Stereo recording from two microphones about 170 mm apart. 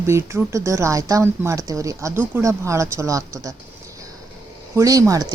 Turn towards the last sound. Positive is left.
turn(degrees=-20)  # may be behind; listen again after turning